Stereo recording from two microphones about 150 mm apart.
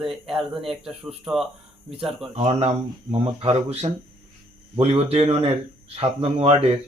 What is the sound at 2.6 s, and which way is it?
Speech, 40° right (ahead or behind).